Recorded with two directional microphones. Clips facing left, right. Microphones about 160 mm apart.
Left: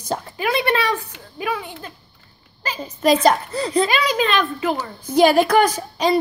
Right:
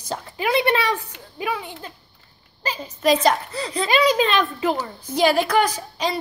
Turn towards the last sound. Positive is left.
turn(degrees=55)  # may be behind; listen again after turning